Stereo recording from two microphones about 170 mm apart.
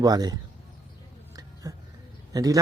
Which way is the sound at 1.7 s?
20° right (ahead or behind).